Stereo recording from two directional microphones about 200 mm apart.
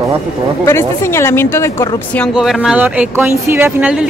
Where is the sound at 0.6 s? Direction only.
10° left (ahead or behind).